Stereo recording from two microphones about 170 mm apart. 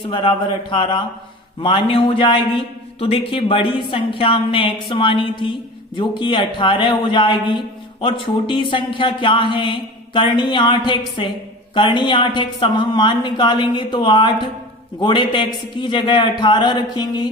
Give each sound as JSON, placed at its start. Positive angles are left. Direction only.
{"t": 0.1, "sound": "a woman's voice", "side_deg": 30}